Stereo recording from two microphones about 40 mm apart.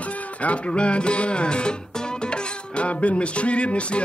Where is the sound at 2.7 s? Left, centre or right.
Left.